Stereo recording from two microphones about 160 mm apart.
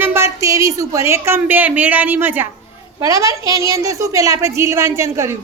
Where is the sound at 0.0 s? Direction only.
15° right (ahead or behind).